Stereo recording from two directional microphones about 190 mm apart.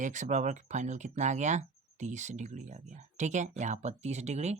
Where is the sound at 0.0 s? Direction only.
40° right (ahead or behind).